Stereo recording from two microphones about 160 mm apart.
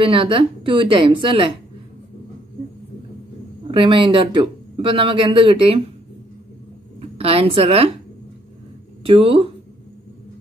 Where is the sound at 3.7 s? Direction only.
30° right (ahead or behind).